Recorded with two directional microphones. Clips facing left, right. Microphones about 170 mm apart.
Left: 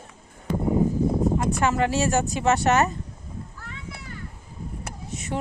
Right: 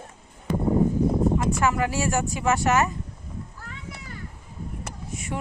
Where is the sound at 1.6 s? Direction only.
30° left (ahead or behind).